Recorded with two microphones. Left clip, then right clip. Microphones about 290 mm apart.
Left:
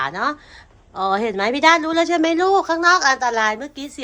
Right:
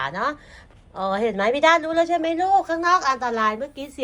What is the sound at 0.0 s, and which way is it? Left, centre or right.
Speech, centre.